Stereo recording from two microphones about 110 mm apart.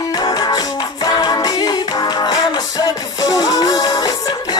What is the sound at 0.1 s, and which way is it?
Music, 40° left (ahead or behind).